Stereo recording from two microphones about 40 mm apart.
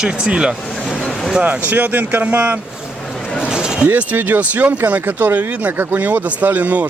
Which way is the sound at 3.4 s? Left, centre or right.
Right.